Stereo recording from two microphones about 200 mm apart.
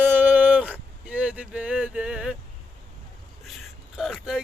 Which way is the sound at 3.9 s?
Centre (ahead or behind).